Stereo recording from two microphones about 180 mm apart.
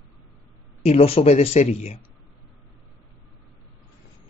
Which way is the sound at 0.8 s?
35° left (ahead or behind).